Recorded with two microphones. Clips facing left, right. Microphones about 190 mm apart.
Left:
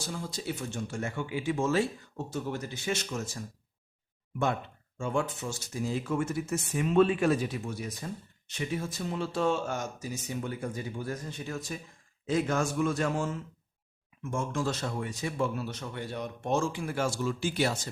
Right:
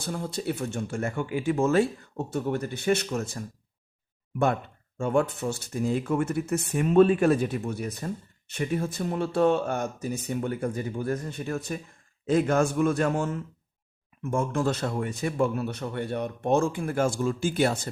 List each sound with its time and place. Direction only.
0.0 s speech: 55° right (ahead or behind)
4.9 s speech: 60° right (ahead or behind)